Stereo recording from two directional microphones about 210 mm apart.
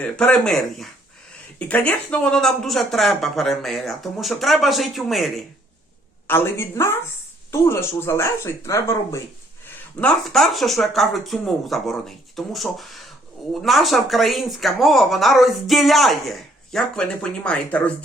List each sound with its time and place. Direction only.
0.0 s speech: 5° left (ahead or behind)
6.2 s speech: 10° left (ahead or behind)